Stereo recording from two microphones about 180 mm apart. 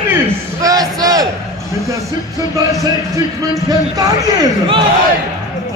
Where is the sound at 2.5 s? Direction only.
20° right (ahead or behind).